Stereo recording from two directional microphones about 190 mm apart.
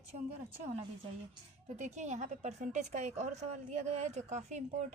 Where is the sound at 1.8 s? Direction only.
40° right (ahead or behind).